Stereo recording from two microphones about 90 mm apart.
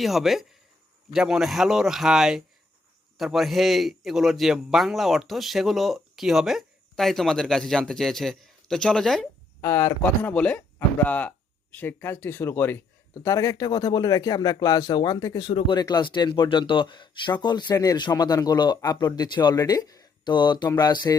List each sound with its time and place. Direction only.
0.0 s a man's voice: centre (ahead or behind)
9.6 s speech: 30° left (ahead or behind)
10.3 s speech: 10° left (ahead or behind)
13.1 s speech: 40° left (ahead or behind)
15.5 s speech: 60° left (ahead or behind)